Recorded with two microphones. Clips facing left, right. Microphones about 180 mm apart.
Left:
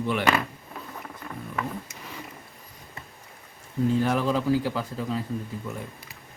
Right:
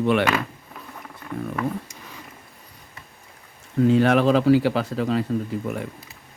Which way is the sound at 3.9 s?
75° right (ahead or behind).